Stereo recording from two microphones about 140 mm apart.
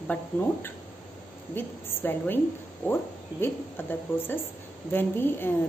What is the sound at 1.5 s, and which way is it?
Speech, 15° left (ahead or behind).